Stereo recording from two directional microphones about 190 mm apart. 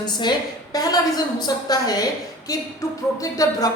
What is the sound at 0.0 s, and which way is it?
A man's voice, 25° left (ahead or behind).